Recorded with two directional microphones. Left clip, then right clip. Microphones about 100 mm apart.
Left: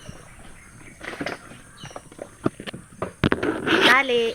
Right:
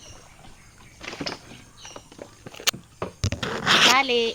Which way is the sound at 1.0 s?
45° right (ahead or behind).